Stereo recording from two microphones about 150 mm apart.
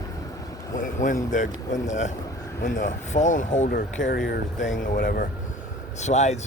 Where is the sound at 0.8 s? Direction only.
60° left (ahead or behind); by 4.2 s 80° left.